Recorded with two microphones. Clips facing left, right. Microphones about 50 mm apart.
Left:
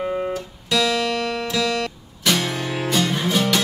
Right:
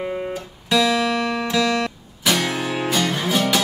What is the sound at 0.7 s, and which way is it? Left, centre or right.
Music, centre.